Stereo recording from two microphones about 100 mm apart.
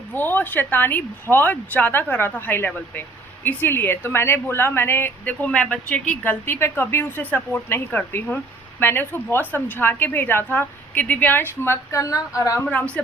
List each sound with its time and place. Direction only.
0.1 s a woman's voice: 20° left (ahead or behind)